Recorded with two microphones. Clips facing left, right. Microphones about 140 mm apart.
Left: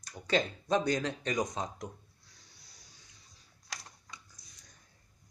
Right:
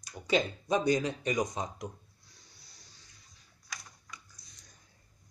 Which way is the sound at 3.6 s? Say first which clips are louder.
Left 1 dB; 30° left (ahead or behind).